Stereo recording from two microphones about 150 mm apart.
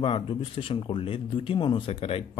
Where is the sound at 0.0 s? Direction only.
35° left (ahead or behind).